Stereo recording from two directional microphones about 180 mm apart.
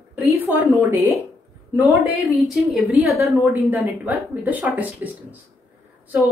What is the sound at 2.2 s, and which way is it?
A woman's voice, centre (ahead or behind).